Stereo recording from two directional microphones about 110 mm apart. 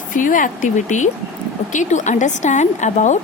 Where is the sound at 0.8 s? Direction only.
90° left.